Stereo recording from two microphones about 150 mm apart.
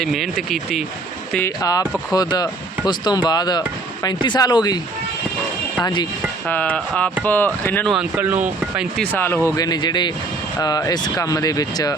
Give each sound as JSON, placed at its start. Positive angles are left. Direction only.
{"t": 0.0, "sound": "speech", "side_deg": 0}
{"t": 1.5, "sound": "speech", "side_deg": 25}
{"t": 5.8, "sound": "speech", "side_deg": 30}
{"t": 6.5, "sound": "speech", "side_deg": 10}
{"t": 7.9, "sound": "speech", "side_deg": -10}
{"t": 9.0, "sound": "speech", "side_deg": 15}